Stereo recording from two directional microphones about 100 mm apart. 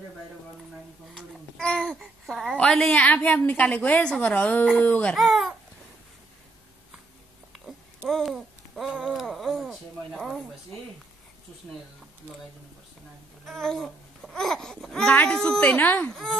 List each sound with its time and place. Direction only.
1.1 s babbling: 5° left (ahead or behind)
1.9 s speech: centre (ahead or behind)
2.5 s speech: 10° left (ahead or behind)
5.1 s speech: centre (ahead or behind)
8.1 s babbling: centre (ahead or behind)
13.5 s speech: 5° left (ahead or behind)
16.1 s speech: centre (ahead or behind)